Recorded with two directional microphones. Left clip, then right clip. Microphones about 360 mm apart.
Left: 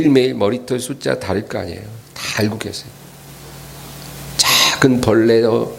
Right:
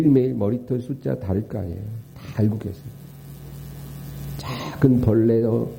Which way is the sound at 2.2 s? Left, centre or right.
Centre.